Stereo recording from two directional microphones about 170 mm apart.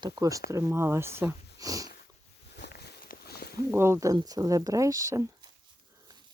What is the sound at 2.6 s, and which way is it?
Walk, 75° left (ahead or behind).